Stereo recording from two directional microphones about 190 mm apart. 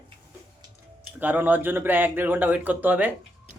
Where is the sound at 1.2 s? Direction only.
10° right (ahead or behind).